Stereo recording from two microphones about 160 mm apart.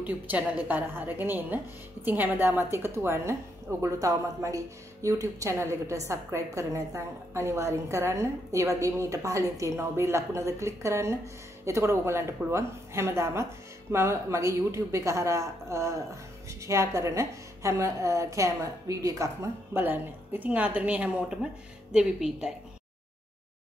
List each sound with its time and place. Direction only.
0.0 s a woman's voice: 10° right (ahead or behind)